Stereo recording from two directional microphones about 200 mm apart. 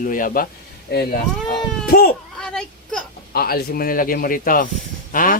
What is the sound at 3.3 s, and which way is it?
Speech, 50° left (ahead or behind).